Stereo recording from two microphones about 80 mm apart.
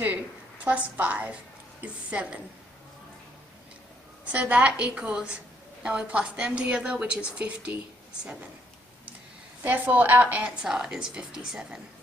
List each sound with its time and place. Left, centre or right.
0.7 s a woman's voice: centre
4.3 s a woman's voice: centre
9.6 s a woman's voice: right; by 11.8 s centre